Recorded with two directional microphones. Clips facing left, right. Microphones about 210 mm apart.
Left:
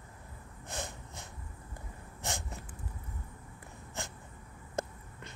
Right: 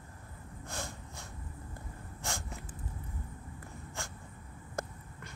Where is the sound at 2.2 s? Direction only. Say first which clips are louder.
Left 1 dB; 20° left (ahead or behind).